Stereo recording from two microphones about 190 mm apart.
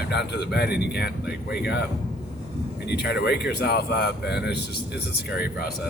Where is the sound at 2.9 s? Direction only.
60° left (ahead or behind).